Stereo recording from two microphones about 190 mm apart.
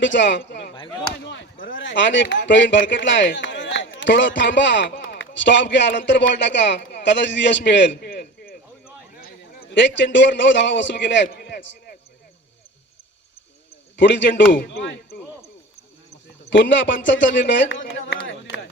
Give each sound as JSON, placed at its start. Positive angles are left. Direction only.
{"t": 0.0, "sound": "a man's voice", "side_deg": 70}
{"t": 0.7, "sound": "chop", "side_deg": 25}
{"t": 1.2, "sound": "a man's voice", "side_deg": 70}
{"t": 9.2, "sound": "a sound", "side_deg": 50}
{"t": 9.7, "sound": "a man's voice", "side_deg": 70}
{"t": 13.9, "sound": "speech", "side_deg": 70}
{"t": 14.5, "sound": "speech", "side_deg": 55}
{"t": 16.5, "sound": "a man's voice", "side_deg": 75}
{"t": 17.9, "sound": "a sound", "side_deg": 70}